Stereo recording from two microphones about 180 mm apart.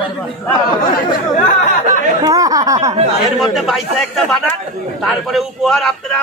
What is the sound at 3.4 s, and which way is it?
A man's voice, centre (ahead or behind).